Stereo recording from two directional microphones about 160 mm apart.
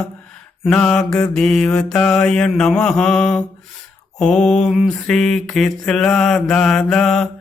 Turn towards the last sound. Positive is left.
turn(degrees=5)  # may be behind; listen again after turning